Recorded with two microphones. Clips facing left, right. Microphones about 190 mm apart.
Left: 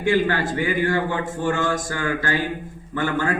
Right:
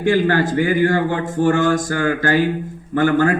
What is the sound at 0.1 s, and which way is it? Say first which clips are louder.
A man's voice: right 4 dB; 40° right (ahead or behind).